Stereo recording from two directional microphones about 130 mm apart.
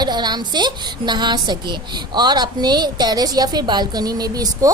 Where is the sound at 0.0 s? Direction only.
35° right (ahead or behind).